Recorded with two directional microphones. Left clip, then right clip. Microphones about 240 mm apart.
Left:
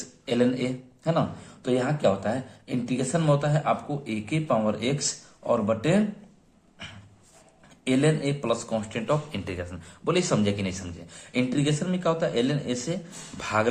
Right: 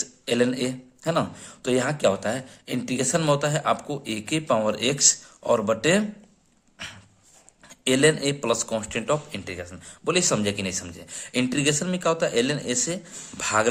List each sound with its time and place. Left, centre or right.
0.0 s speech: right
7.7 s speech: right
9.3 s a man's voice: centre